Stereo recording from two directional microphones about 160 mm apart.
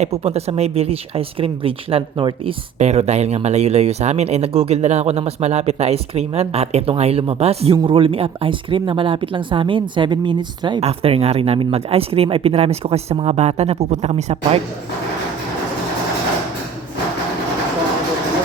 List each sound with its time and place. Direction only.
0.0 s speech: 40° right (ahead or behind)
10.8 s speech: 40° right (ahead or behind)